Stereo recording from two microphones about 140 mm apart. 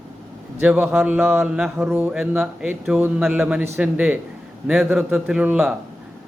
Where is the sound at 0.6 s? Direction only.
10° right (ahead or behind).